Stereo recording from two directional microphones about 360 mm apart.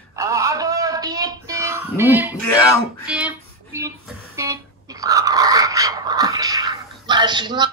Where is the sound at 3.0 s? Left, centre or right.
Centre.